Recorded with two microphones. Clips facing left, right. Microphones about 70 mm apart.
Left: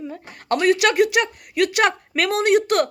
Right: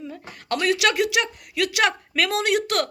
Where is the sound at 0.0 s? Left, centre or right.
Left.